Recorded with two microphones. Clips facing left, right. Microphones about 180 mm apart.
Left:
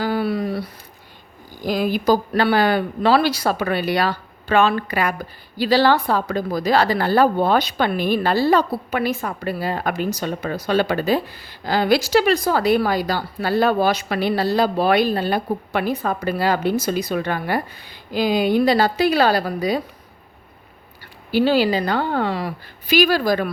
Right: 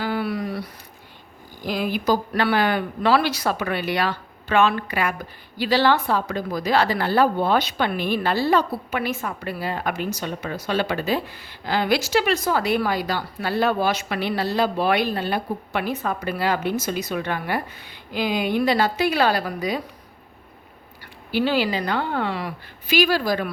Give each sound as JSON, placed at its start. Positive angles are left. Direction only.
{"t": 0.0, "sound": "a sound", "side_deg": 35}
{"t": 1.6, "sound": "a woman's voice", "side_deg": 40}
{"t": 21.3, "sound": "a woman's voice", "side_deg": 35}